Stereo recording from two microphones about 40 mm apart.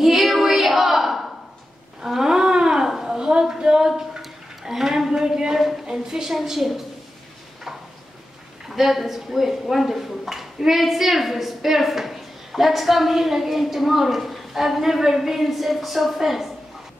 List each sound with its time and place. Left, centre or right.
0.0 s a sound: centre
3.3 s a woman's voice: centre
8.6 s a woman's voice: centre